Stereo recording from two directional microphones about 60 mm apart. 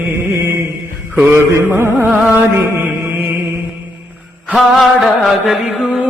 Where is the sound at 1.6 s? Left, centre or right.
Right.